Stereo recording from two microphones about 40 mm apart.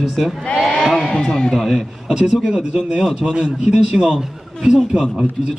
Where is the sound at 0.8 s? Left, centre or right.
Centre.